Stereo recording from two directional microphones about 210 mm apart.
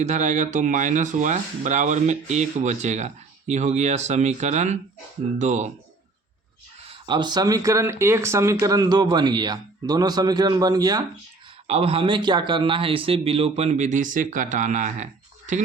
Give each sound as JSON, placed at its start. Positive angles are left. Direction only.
{"t": 0.0, "sound": "speech", "side_deg": -35}
{"t": 6.8, "sound": "speech", "side_deg": -20}
{"t": 11.7, "sound": "speech", "side_deg": -30}